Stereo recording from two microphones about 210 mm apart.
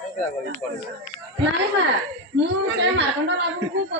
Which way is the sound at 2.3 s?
55° right (ahead or behind).